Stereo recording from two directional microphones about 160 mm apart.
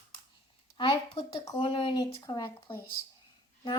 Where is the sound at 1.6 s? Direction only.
35° left (ahead or behind).